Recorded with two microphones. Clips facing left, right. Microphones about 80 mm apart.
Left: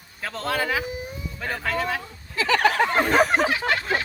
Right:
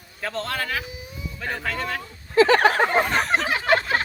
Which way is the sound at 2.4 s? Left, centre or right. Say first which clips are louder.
Right 5 dB; right.